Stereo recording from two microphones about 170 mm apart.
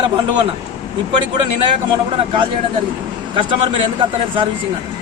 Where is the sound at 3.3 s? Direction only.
30° right (ahead or behind).